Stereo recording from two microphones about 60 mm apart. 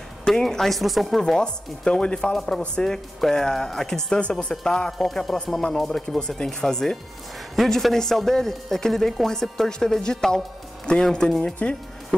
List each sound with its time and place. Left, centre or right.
0.2 s speech: centre
1.2 s speech: centre